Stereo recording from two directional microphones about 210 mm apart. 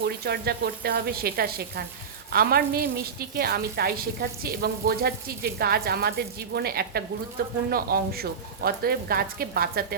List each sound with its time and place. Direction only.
0.0 s a woman's voice: 50° right (ahead or behind)